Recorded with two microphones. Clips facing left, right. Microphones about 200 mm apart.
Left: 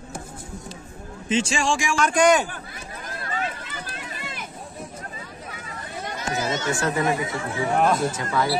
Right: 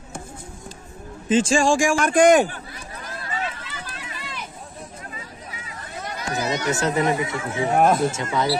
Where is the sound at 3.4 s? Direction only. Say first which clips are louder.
Even; 50° left (ahead or behind).